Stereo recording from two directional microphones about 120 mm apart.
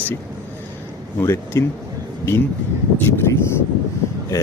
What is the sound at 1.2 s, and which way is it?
Speech, 25° left (ahead or behind).